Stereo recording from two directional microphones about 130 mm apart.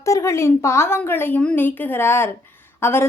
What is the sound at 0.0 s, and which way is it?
A woman's voice, 25° left (ahead or behind).